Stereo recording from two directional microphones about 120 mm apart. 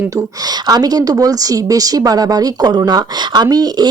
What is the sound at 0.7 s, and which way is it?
A woman's voice, 30° right (ahead or behind).